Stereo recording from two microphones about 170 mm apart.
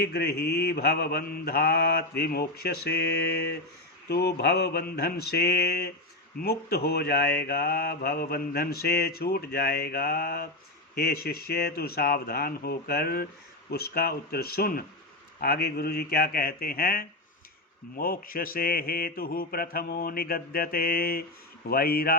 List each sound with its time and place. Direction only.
0.0 s mantra: 65° left (ahead or behind)